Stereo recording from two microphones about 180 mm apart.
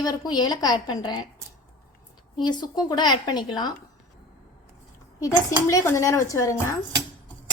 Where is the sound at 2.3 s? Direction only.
25° left (ahead or behind).